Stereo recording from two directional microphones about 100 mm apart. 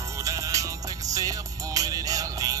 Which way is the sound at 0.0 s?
30° right (ahead or behind).